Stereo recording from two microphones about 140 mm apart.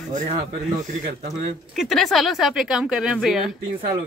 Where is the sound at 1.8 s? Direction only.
Centre (ahead or behind).